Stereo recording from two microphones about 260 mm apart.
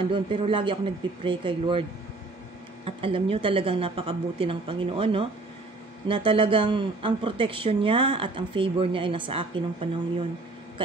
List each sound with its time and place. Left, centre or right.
0.1 s speech: centre